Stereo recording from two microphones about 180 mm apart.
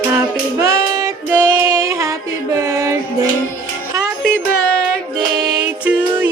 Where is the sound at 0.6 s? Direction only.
15° right (ahead or behind).